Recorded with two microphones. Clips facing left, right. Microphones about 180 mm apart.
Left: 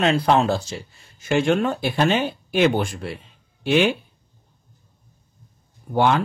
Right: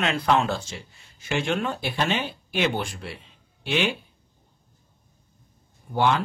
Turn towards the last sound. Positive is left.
turn(degrees=50)  # may be behind; listen again after turning